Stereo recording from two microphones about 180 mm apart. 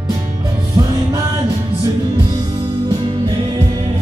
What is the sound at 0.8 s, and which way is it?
Music, 15° right (ahead or behind).